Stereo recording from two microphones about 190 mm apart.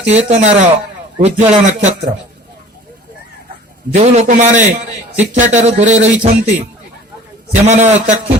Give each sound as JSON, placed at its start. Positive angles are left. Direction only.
{"t": 0.1, "sound": "a man's voice", "side_deg": -35}
{"t": 3.9, "sound": "a man's voice", "side_deg": -35}
{"t": 7.6, "sound": "a man's voice", "side_deg": -35}